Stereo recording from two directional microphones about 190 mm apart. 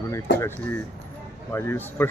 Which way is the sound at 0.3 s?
10° left (ahead or behind).